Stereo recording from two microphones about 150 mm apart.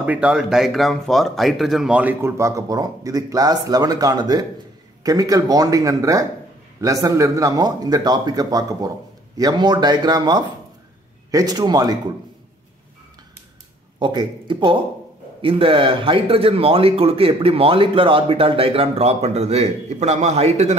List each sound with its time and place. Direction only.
0.0 s a man's voice: 10° right (ahead or behind); by 12.0 s 25° right (ahead or behind)
13.9 s speech: 30° right (ahead or behind)